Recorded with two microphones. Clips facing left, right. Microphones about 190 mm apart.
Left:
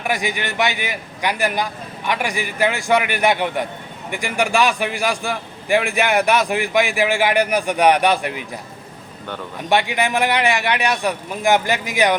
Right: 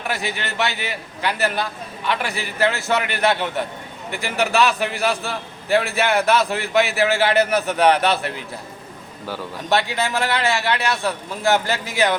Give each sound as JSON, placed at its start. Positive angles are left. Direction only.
{"t": 0.1, "sound": "a man's voice", "side_deg": 15}
{"t": 9.6, "sound": "a man's voice", "side_deg": 15}